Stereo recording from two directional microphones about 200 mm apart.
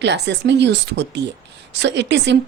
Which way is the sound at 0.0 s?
60° right (ahead or behind).